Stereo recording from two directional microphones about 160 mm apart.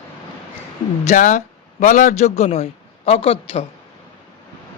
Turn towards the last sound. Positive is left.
turn(degrees=35)  # may be behind; listen again after turning